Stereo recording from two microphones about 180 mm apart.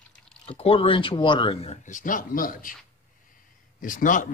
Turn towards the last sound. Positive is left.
turn(degrees=45)  # may be behind; listen again after turning